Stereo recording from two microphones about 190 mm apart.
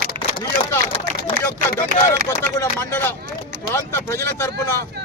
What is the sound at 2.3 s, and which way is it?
Speech, 10° left (ahead or behind).